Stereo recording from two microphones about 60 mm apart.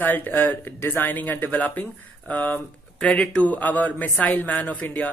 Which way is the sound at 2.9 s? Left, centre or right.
Centre.